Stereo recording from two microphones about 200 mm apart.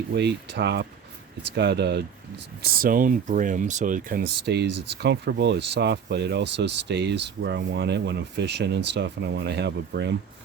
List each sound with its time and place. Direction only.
0.1 s speech: 60° right (ahead or behind)
2.6 s speech: 45° right (ahead or behind)